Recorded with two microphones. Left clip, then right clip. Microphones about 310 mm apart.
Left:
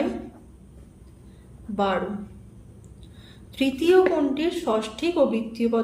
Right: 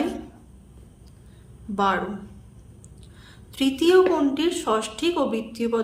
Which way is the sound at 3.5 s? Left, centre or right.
Centre.